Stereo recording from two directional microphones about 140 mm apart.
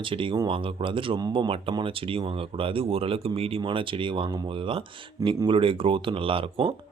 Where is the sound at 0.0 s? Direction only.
35° right (ahead or behind).